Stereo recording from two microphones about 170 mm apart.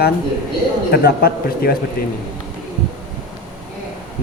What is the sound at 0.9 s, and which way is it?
Speech, 65° left (ahead or behind).